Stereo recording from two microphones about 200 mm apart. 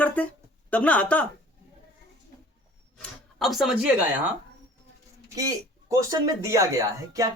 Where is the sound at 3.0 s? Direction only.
Centre (ahead or behind).